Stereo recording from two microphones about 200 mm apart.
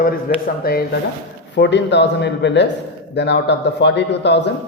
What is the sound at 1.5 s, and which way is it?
A man's voice, 60° left (ahead or behind).